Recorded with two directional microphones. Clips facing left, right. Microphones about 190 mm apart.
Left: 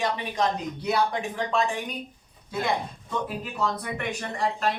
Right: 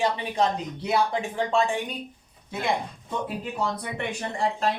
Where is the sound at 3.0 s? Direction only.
25° right (ahead or behind).